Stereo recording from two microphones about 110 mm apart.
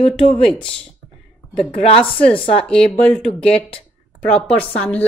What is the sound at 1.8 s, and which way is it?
Speech, 60° left (ahead or behind).